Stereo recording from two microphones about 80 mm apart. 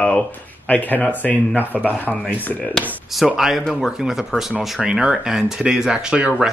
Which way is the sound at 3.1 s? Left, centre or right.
Centre.